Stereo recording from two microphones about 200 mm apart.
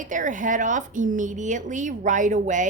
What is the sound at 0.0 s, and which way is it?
Speech, 40° right (ahead or behind).